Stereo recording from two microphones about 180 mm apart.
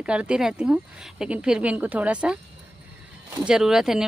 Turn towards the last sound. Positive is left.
turn(degrees=-5)  # may be behind; listen again after turning